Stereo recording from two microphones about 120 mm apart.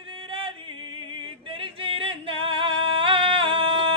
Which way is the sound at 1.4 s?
45° right (ahead or behind).